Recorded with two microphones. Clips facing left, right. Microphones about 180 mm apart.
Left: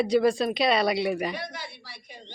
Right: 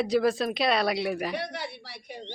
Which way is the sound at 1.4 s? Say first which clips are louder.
Right 3 dB; 65° right (ahead or behind).